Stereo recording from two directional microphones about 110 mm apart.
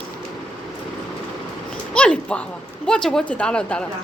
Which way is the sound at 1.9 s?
10° left (ahead or behind).